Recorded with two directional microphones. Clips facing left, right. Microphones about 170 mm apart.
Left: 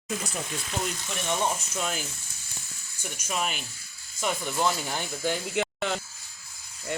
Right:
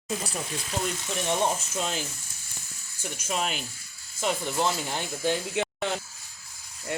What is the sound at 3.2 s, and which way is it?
Speech, 30° right (ahead or behind).